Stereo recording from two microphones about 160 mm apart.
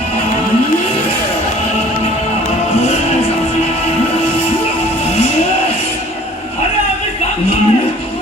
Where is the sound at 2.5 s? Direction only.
45° left (ahead or behind).